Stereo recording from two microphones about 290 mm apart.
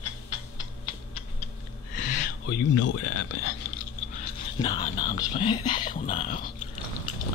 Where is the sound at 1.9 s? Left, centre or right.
Left.